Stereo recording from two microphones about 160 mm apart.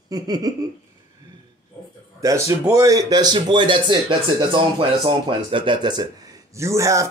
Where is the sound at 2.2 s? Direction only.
20° right (ahead or behind).